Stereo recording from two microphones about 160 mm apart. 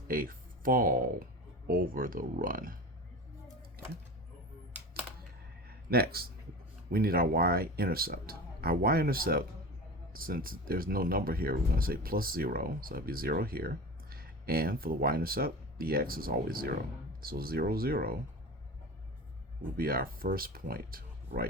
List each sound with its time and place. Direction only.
0.1 s speech: 60° right (ahead or behind)
5.6 s a sound: 75° right (ahead or behind)
6.9 s speech: 70° right (ahead or behind)
19.7 s speech: 70° right (ahead or behind)